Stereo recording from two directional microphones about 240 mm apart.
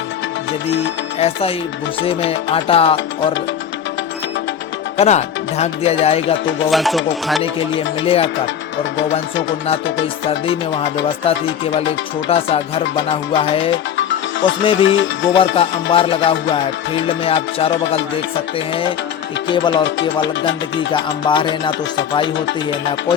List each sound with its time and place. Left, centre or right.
1.2 s music: left
4.9 s music: left
6.7 s music: centre
8.0 s music: left
8.8 s music: left
10.2 s music: left
13.9 s music: left
14.6 s music: left
14.8 s music: left
15.4 s music: left